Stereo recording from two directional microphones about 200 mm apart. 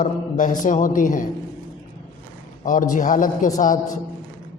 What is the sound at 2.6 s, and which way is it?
A man's voice, 40° left (ahead or behind).